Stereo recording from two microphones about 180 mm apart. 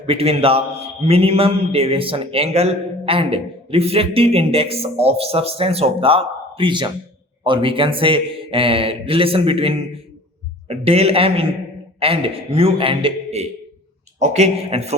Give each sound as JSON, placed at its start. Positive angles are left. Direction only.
{"t": 0.0, "sound": "a man's voice", "side_deg": -30}